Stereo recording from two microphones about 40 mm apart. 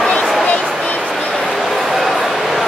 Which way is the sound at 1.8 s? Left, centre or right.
Centre.